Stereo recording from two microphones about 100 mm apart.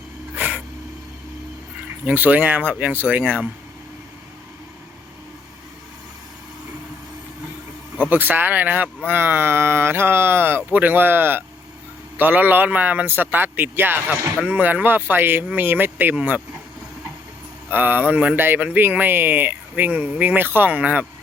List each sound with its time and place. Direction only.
0.3 s a sound: 15° right (ahead or behind)
2.0 s speech: 15° right (ahead or behind)
8.1 s speech: 20° right (ahead or behind)
17.7 s speech: 20° right (ahead or behind)